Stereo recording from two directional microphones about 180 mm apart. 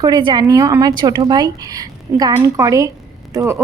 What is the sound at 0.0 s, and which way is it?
Speech, 25° right (ahead or behind).